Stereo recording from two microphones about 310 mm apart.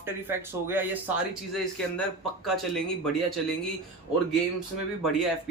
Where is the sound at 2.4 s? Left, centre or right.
Centre.